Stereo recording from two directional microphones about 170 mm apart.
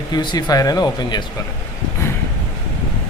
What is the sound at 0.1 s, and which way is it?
Speech, 25° left (ahead or behind).